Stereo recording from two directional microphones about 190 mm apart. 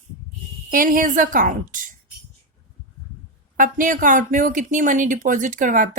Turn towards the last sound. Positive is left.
turn(degrees=-45)  # may be behind; listen again after turning